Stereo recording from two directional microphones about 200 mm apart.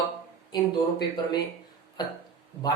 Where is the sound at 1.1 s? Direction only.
20° left (ahead or behind).